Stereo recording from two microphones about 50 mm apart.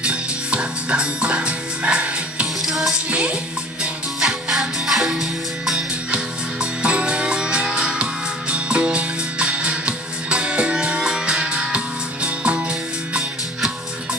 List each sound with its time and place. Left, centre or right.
0.0 s music: right
2.6 s music: centre
3.1 s music: right
4.2 s music: centre
6.1 s music: right